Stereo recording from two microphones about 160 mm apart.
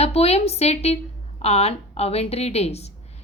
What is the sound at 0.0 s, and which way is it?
A woman's voice, 40° left (ahead or behind).